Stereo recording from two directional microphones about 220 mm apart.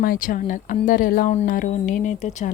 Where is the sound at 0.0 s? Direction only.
40° left (ahead or behind).